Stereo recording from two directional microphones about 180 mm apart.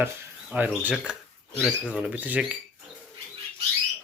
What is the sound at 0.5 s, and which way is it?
Speech, 10° right (ahead or behind).